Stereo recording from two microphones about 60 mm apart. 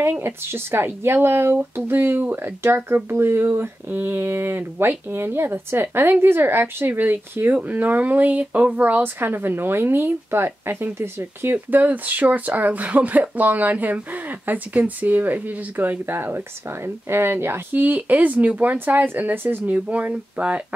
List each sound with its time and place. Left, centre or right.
0.2 s speech: right
11.5 s speech: right
17.8 s speech: right
19.7 s speech: right